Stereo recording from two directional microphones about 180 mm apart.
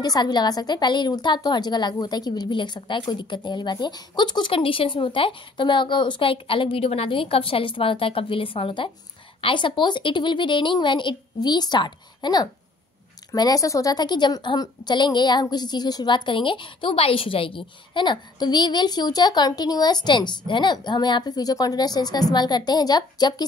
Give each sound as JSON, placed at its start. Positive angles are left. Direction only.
{"t": 0.0, "sound": "a woman's voice", "side_deg": 20}